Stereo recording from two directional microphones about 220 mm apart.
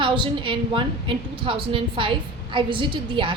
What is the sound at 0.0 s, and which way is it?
A woman's voice, 20° right (ahead or behind).